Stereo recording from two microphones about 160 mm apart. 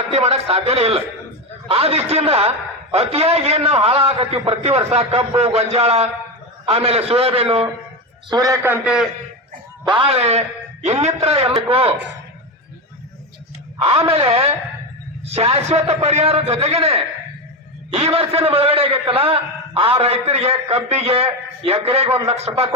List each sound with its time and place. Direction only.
0.1 s a man's voice: 40° right (ahead or behind)
8.3 s a man's voice: 20° right (ahead or behind); by 9.0 s 5° right (ahead or behind)
9.8 s a man's voice: 30° right (ahead or behind)
14.1 s a man's voice: 35° right (ahead or behind)